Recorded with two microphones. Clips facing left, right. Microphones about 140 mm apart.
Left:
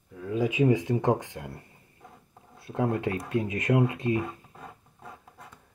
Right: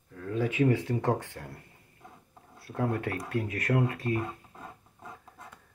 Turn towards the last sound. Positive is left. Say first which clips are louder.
# left 4 dB
turn(degrees=20)  # may be behind; listen again after turning